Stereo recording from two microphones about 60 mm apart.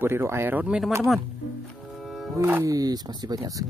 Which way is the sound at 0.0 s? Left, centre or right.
Right.